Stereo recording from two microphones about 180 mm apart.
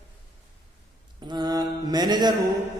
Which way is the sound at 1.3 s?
20° right (ahead or behind).